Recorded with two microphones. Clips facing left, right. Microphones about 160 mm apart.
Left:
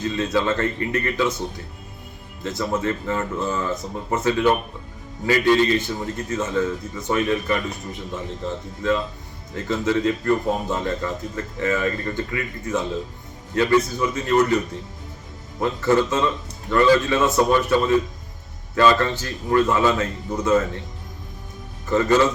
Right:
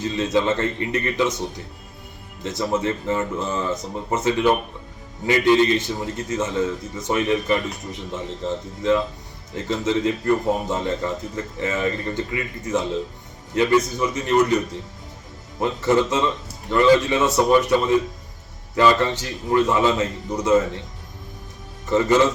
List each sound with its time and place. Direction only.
0.0 s a man's voice: 20° right (ahead or behind)
9.6 s a man's voice: 20° right (ahead or behind)
15.6 s a man's voice: 20° right (ahead or behind)
21.8 s a man's voice: 20° right (ahead or behind)